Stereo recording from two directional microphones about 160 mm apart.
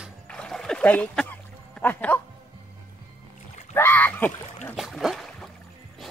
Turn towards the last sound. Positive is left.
turn(degrees=0)  # may be behind; listen again after turning